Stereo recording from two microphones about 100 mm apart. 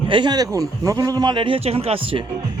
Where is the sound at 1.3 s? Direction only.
60° right (ahead or behind).